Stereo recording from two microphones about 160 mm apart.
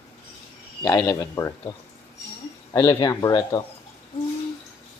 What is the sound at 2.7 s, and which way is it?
Speech, 25° left (ahead or behind).